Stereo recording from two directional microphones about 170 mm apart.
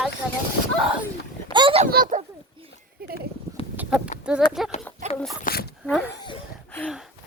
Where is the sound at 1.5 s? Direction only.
30° right (ahead or behind).